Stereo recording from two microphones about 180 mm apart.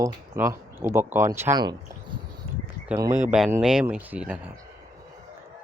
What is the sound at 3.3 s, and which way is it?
Speech, centre (ahead or behind).